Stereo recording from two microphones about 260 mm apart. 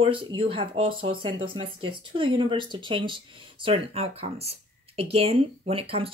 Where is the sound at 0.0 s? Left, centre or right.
Centre.